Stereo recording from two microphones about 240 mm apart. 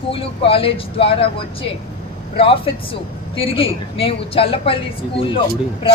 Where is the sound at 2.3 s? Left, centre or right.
Left.